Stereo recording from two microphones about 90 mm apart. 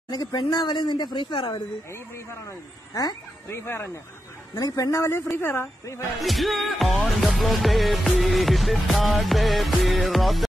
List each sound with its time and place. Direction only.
0.1 s speech: 50° left (ahead or behind); by 1.6 s 65° left (ahead or behind)
1.9 s speech: 35° left (ahead or behind)
3.4 s a woman's voice: 30° left (ahead or behind)
4.6 s a woman's voice: 45° left (ahead or behind); by 6.0 s 25° left (ahead or behind)
6.2 s music: centre (ahead or behind)